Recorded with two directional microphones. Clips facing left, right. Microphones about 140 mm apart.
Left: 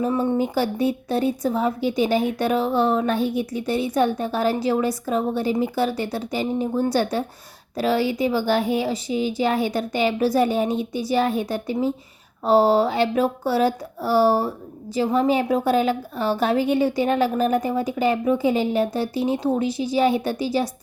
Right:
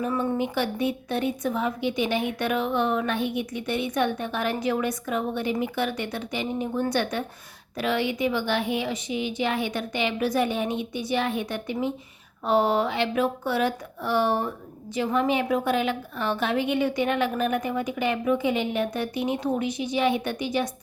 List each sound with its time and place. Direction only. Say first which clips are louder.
0.0 s a woman's voice: left 4 dB; 30° left (ahead or behind)